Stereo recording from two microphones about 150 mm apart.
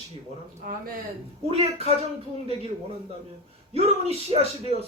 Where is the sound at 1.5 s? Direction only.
45° right (ahead or behind).